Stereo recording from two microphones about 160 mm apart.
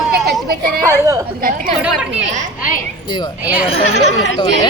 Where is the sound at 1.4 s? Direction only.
65° right (ahead or behind).